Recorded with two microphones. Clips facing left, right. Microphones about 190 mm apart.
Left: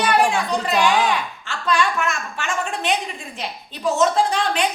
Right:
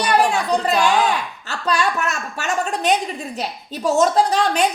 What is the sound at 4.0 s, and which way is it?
Speech, 40° right (ahead or behind).